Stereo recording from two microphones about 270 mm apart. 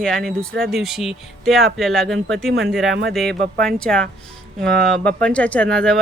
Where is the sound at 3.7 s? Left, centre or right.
Centre.